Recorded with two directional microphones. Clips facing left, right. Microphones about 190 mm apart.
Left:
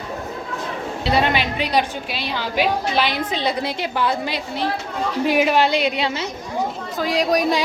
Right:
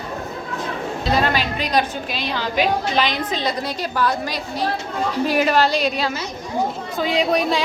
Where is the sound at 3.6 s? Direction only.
20° left (ahead or behind).